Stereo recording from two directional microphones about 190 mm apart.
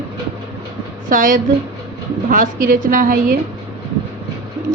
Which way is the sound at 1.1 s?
45° right (ahead or behind).